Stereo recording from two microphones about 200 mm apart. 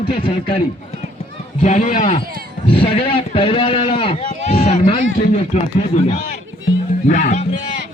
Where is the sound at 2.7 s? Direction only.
25° left (ahead or behind).